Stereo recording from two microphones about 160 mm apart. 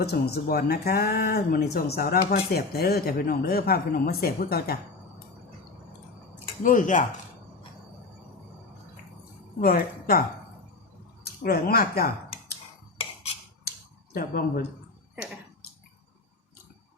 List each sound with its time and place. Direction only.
0.0 s speech: 90° left; by 4.8 s 75° left (ahead or behind)
6.6 s speech: 55° left (ahead or behind)
9.6 s speech: 65° left (ahead or behind)
11.4 s speech: 65° left (ahead or behind)
13.7 s a sound: 70° left (ahead or behind)